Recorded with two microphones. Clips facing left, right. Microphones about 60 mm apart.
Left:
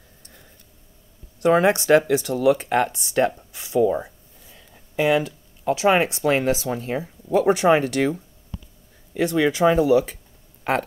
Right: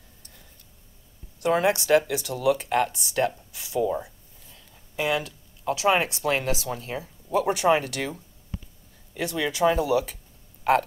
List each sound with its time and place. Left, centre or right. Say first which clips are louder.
1.4 s speech: left 5 dB; left
4.9 s speech: left 6 dB; left
9.1 s speech: left 8 dB; left